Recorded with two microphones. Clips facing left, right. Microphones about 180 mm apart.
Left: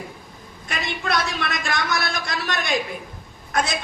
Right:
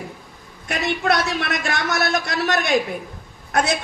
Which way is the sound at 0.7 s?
60° right (ahead or behind).